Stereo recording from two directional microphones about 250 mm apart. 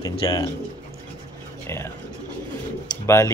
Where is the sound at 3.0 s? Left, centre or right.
Centre.